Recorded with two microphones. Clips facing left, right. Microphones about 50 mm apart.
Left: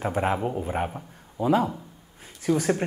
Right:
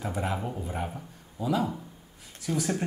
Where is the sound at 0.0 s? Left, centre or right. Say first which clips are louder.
Left 6 dB; left.